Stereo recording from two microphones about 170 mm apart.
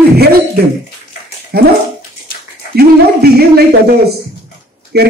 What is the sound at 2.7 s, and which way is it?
A man's voice, 70° right (ahead or behind).